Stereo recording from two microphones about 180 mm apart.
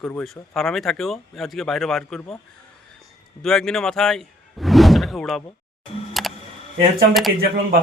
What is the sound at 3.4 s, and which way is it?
Speech, centre (ahead or behind).